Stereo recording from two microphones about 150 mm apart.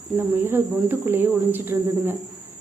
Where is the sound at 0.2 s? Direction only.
15° right (ahead or behind).